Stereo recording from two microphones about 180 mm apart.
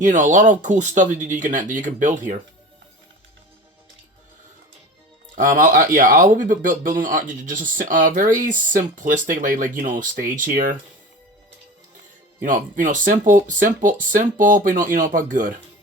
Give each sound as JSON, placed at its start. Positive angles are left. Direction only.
{"t": 0.0, "sound": "speech", "side_deg": -45}
{"t": 5.3, "sound": "speech", "side_deg": -50}
{"t": 12.4, "sound": "speech", "side_deg": -50}